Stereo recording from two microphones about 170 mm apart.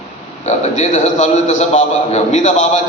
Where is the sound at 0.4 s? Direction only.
40° left (ahead or behind).